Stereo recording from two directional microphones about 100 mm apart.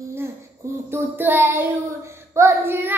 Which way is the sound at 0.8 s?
20° right (ahead or behind).